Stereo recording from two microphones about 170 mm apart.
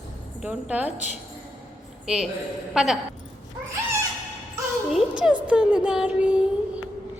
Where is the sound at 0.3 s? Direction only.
5° right (ahead or behind).